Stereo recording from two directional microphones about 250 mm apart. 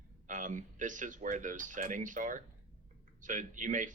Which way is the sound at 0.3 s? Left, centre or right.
Right.